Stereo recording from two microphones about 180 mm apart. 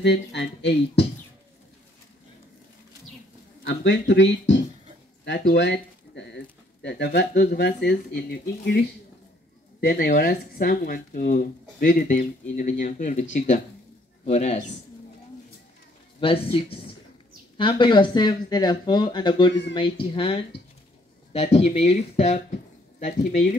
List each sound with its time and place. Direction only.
0.0 s speech: 70° left (ahead or behind)
3.6 s speech: 75° left (ahead or behind); by 14.7 s 35° left (ahead or behind)
16.2 s speech: 30° left (ahead or behind)